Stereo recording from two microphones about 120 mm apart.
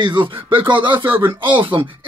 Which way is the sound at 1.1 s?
20° right (ahead or behind).